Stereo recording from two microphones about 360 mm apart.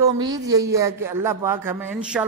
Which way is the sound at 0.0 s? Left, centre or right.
Centre.